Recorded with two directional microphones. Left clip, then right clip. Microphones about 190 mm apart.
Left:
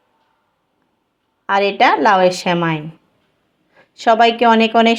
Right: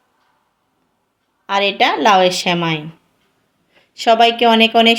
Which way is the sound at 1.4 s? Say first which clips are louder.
Left 2 dB; 20° left (ahead or behind).